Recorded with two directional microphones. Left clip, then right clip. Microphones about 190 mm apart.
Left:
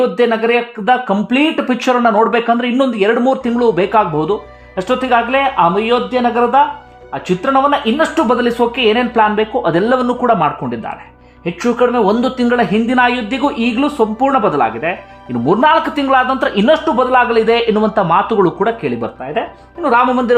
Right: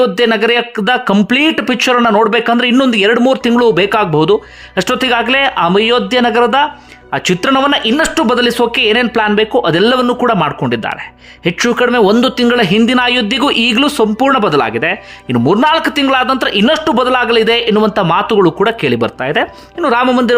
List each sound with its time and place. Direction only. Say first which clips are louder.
0.0 s speech: right 2 dB; 20° right (ahead or behind)